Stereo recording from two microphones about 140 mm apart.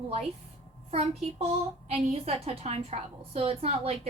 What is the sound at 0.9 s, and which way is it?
A woman's voice, 45° right (ahead or behind).